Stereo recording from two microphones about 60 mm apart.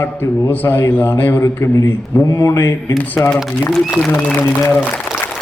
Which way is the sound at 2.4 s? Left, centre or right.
Left.